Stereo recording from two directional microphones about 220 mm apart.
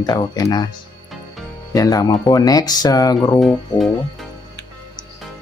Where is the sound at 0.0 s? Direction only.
20° left (ahead or behind).